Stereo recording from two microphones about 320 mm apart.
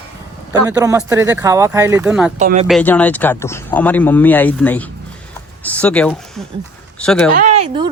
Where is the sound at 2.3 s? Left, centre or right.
Right.